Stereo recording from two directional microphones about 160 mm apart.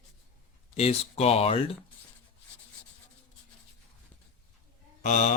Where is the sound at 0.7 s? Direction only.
40° left (ahead or behind).